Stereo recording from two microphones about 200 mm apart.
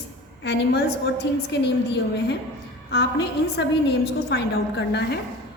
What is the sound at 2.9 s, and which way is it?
A woman's voice, 55° left (ahead or behind).